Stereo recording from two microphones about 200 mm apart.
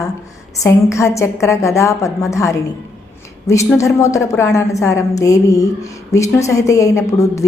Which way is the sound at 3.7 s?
15° left (ahead or behind).